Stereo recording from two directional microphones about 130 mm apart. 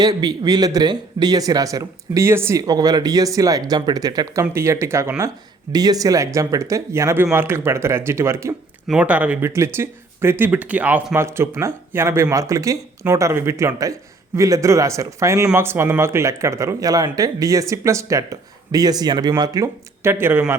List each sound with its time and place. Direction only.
0.0 s speech: 30° right (ahead or behind)
5.7 s speech: 30° right (ahead or behind)
8.9 s speech: 10° right (ahead or behind)